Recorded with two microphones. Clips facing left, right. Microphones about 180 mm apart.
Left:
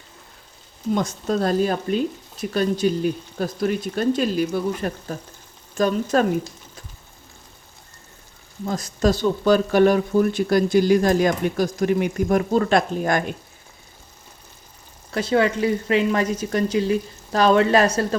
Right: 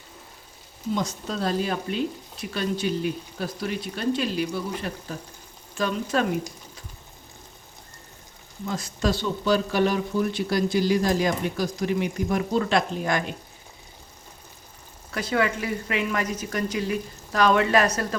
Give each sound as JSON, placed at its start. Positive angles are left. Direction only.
{"t": 0.9, "sound": "speech", "side_deg": 50}
{"t": 8.6, "sound": "speech", "side_deg": 40}
{"t": 15.1, "sound": "speech", "side_deg": 30}